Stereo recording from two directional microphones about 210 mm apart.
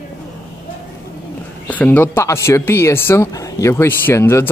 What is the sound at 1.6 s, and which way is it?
Speech, 10° left (ahead or behind).